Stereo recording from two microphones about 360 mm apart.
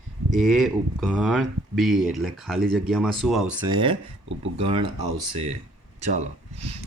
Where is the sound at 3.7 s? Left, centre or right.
Centre.